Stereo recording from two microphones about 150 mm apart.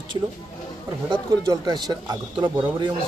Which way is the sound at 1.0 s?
30° right (ahead or behind).